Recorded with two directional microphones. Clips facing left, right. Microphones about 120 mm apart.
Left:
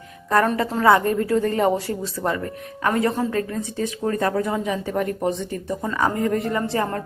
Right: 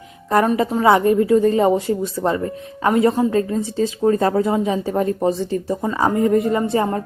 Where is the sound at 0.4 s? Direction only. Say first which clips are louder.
Right 3 dB; 15° right (ahead or behind).